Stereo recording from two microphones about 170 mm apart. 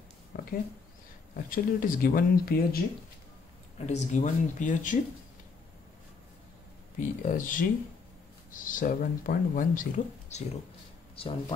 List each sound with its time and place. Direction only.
1.5 s speech: 55° left (ahead or behind)
3.8 s speech: 45° left (ahead or behind)
7.0 s speech: 50° left (ahead or behind)
11.1 s speech: 30° left (ahead or behind)